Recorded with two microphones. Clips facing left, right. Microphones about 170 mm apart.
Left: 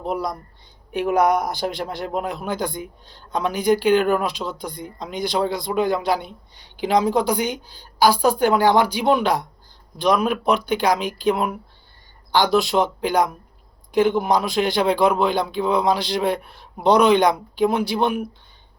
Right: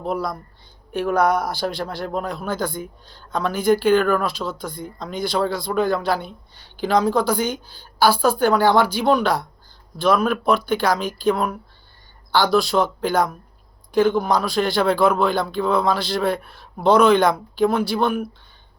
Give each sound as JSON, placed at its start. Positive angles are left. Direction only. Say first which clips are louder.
{"t": 0.0, "sound": "a man's voice", "louder": "even", "side_deg": 15}